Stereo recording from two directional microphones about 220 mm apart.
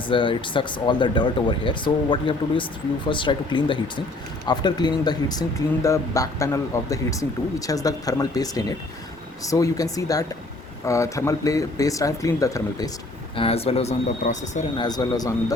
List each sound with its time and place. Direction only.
0.1 s speech: 20° left (ahead or behind)
13.3 s speech: 25° left (ahead or behind)
14.8 s speech: 20° left (ahead or behind)